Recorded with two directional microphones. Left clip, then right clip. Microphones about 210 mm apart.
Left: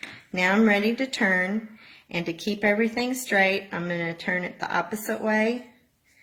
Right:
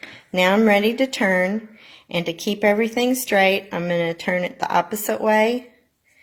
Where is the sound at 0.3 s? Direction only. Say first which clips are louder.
Right 5 dB; 30° right (ahead or behind).